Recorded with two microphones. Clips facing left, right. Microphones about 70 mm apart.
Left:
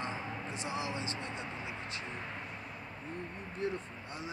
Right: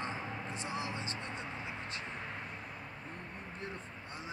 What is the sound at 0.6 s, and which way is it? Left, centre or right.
Vehicle, centre.